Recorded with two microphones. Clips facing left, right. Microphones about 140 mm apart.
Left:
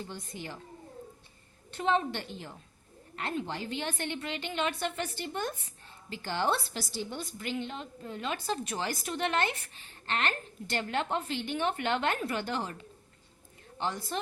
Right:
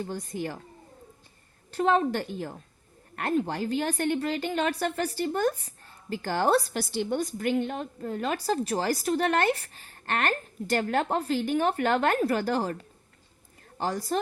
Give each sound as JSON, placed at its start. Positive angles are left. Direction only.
{"t": 0.0, "sound": "a woman's voice", "side_deg": -50}
{"t": 1.7, "sound": "a woman's voice", "side_deg": -45}
{"t": 6.7, "sound": "a woman's voice", "side_deg": -60}
{"t": 7.2, "sound": "a woman's voice", "side_deg": -50}